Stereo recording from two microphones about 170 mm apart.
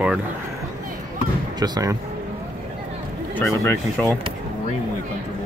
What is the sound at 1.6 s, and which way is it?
Speech, 20° right (ahead or behind).